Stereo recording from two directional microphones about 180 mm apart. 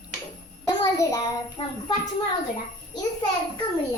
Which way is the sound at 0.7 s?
20° left (ahead or behind).